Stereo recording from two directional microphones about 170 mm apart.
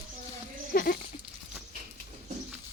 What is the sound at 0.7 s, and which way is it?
Goat, 55° left (ahead or behind).